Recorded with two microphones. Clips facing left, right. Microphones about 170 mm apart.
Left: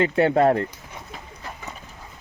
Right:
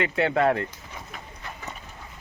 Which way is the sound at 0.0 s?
40° left (ahead or behind).